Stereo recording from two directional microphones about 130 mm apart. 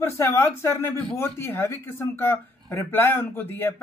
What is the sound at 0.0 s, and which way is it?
A man's voice, 25° left (ahead or behind).